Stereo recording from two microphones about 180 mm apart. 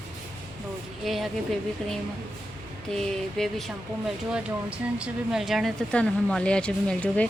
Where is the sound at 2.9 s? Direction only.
5° left (ahead or behind).